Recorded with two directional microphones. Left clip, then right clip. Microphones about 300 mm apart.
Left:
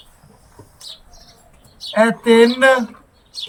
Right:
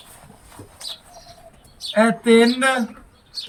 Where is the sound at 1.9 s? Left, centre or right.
Centre.